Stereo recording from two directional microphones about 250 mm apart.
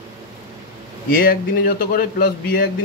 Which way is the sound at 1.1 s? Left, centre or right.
Left.